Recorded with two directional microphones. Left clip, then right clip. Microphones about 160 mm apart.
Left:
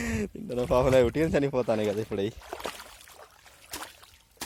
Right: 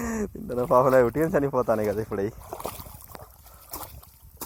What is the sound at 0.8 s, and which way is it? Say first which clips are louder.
Speech: right 3 dB; 20° left (ahead or behind).